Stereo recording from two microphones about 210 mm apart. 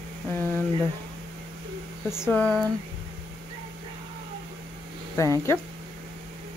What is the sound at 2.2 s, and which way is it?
Speech, 5° left (ahead or behind).